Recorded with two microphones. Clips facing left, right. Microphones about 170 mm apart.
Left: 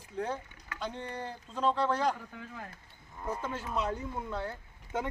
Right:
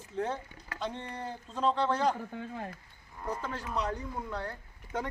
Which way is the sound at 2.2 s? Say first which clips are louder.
Right 6 dB; 30° right (ahead or behind).